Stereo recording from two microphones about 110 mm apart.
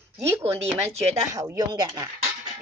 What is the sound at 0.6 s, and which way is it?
Speech, 70° right (ahead or behind).